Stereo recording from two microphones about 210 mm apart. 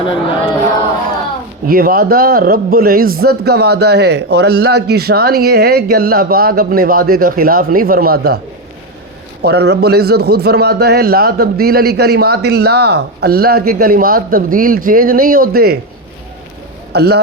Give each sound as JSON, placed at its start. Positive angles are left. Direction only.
{"t": 1.6, "sound": "a man's voice", "side_deg": -45}
{"t": 9.4, "sound": "a man's voice", "side_deg": -50}
{"t": 16.9, "sound": "speech", "side_deg": -50}